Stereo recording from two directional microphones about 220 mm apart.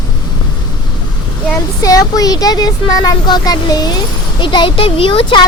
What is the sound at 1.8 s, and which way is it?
Speech, 15° left (ahead or behind).